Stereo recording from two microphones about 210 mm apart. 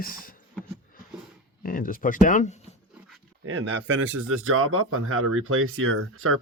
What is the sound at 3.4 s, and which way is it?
Speech, 65° right (ahead or behind).